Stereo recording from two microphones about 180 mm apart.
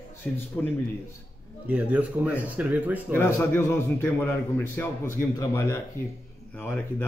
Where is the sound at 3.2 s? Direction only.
10° left (ahead or behind).